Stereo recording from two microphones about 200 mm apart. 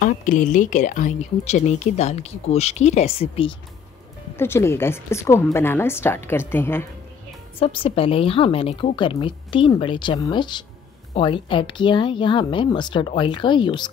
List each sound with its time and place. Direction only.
0.0 s speech: 40° left (ahead or behind)
4.4 s a woman's voice: 10° left (ahead or behind)
7.5 s a woman's voice: 25° left (ahead or behind)